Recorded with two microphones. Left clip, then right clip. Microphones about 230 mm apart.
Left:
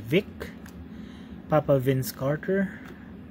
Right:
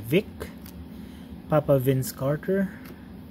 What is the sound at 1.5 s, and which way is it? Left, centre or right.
Speech, centre.